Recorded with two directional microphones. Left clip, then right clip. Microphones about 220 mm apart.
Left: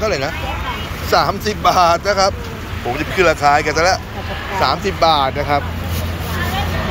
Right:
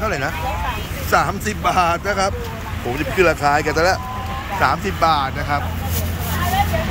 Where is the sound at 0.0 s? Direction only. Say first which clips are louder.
Left 3 dB; 15° right (ahead or behind).